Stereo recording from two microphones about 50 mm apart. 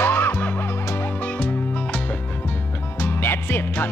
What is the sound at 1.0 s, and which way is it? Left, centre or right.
Music, left.